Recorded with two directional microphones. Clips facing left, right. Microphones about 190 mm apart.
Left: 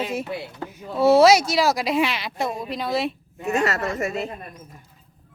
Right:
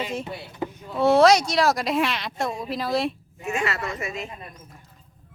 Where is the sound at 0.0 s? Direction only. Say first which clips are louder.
Left 3 dB; 5° left (ahead or behind).